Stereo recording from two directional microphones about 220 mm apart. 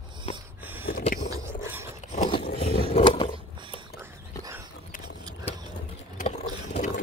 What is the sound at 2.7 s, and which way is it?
Roaring cats, 25° left (ahead or behind).